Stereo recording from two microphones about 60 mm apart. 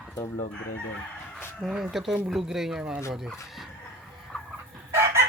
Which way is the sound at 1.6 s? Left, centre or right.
Centre.